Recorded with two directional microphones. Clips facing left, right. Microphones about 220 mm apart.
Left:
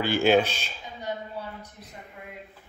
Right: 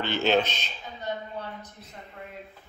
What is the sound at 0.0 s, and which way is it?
Speech, 10° left (ahead or behind).